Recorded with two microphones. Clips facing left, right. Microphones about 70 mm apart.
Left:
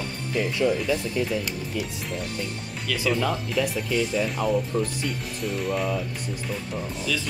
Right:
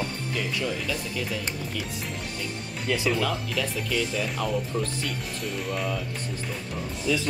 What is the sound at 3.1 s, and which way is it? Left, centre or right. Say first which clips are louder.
Speech: left 2 dB; centre.